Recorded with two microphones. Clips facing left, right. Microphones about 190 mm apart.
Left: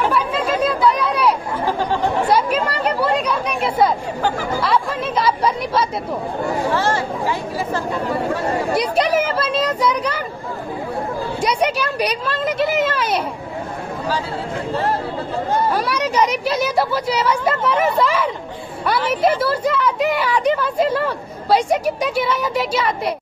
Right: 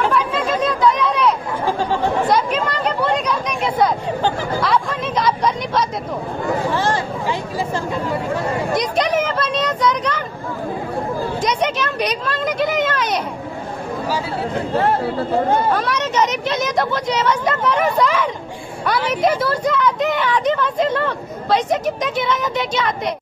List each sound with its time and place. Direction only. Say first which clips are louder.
0.0 s chatter: even; 10° left (ahead or behind)
6.7 s speech: even; 15° right (ahead or behind)
8.7 s speech: left 1 dB; 5° left (ahead or behind)
11.4 s a woman's voice: left 2 dB; 10° left (ahead or behind)
15.7 s a woman's voice: even; 10° left (ahead or behind)